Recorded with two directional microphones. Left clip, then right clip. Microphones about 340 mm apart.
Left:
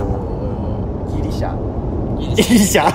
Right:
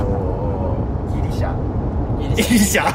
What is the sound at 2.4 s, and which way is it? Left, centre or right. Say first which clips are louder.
Speech: left 4 dB; centre.